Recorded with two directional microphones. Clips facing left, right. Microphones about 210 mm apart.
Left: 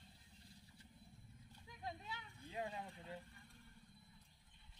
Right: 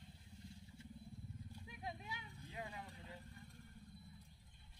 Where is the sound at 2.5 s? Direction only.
30° left (ahead or behind).